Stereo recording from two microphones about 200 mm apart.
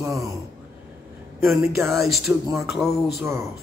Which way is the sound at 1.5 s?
15° right (ahead or behind).